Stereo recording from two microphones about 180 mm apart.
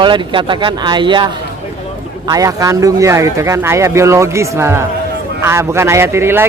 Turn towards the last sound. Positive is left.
turn(degrees=-15)  # may be behind; listen again after turning